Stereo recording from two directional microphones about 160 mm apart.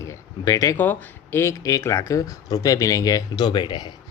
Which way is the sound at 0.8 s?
10° left (ahead or behind).